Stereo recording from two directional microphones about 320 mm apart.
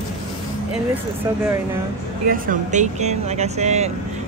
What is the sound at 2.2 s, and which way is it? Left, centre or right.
Speech, right.